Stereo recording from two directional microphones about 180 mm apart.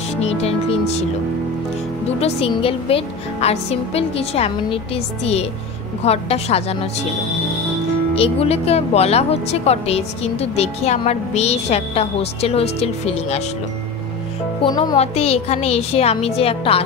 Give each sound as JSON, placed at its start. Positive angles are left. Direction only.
{"t": 0.2, "sound": "speech", "side_deg": 35}
{"t": 2.0, "sound": "speech", "side_deg": 35}
{"t": 8.1, "sound": "speech", "side_deg": 35}
{"t": 14.6, "sound": "speech", "side_deg": 25}